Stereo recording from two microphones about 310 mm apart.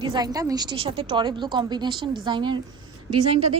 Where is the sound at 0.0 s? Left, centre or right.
Centre.